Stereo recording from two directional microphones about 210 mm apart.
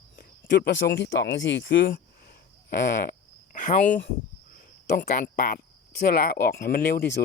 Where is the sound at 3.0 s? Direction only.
40° left (ahead or behind).